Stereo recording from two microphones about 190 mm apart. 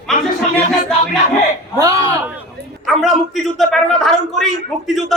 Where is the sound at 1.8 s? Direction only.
20° right (ahead or behind).